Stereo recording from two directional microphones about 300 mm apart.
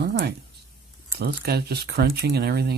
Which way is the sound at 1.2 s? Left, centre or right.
Right.